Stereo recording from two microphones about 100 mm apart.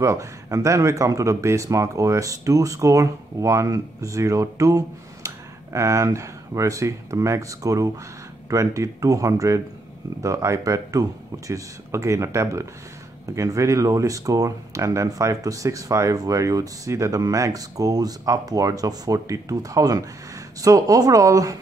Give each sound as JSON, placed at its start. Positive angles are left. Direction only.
{"t": 0.0, "sound": "speech", "side_deg": -30}